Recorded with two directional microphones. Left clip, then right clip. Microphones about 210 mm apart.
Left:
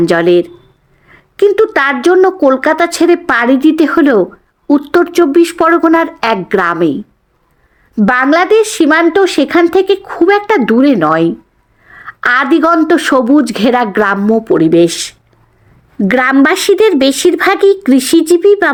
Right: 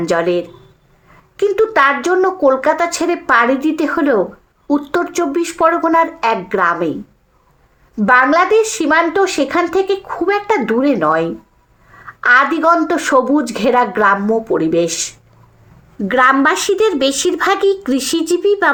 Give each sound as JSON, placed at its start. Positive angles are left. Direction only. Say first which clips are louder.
{"t": 0.0, "sound": "speech", "louder": "left 6 dB", "side_deg": 45}
{"t": 7.9, "sound": "a woman's voice", "louder": "left 1 dB", "side_deg": 45}